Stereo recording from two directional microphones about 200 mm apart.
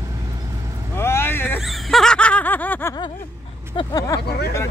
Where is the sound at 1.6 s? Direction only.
Centre (ahead or behind).